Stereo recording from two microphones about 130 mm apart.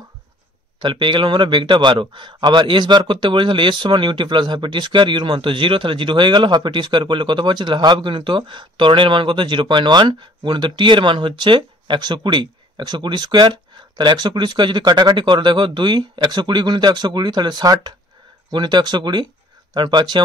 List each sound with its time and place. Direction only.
0.7 s a man's voice: 40° right (ahead or behind)